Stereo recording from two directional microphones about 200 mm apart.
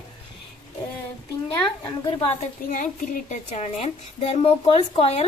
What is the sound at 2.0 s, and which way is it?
A woman's voice, 35° left (ahead or behind).